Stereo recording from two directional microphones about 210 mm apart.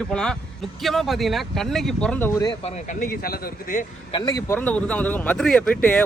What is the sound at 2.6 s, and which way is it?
Speech, 35° left (ahead or behind).